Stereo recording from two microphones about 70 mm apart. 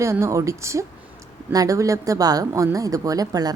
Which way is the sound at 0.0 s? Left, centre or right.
Right.